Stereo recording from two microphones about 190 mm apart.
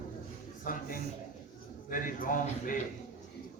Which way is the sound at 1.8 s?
45° left (ahead or behind).